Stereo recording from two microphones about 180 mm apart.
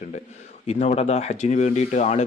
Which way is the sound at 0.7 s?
35° left (ahead or behind).